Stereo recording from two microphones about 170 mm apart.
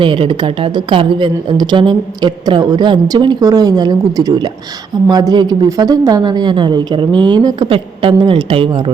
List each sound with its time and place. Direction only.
0.0 s a woman's voice: 30° right (ahead or behind)